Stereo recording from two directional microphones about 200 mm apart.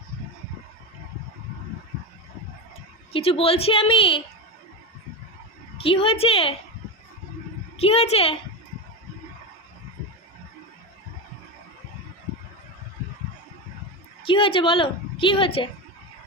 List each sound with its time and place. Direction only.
3.1 s a woman's voice: 30° left (ahead or behind)
5.7 s a woman's voice: 25° left (ahead or behind)
7.8 s a woman's voice: 30° left (ahead or behind)
14.3 s a woman's voice: 25° left (ahead or behind)